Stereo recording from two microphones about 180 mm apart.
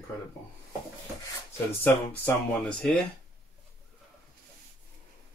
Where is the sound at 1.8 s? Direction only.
10° left (ahead or behind).